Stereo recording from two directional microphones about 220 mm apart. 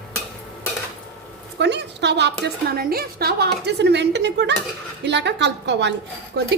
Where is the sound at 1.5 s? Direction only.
50° right (ahead or behind).